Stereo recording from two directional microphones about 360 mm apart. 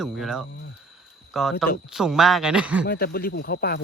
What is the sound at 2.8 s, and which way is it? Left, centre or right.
Speech, left.